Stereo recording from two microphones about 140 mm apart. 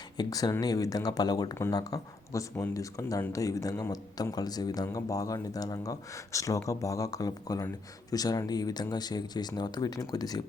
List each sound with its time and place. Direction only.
0.2 s speech: 25° left (ahead or behind)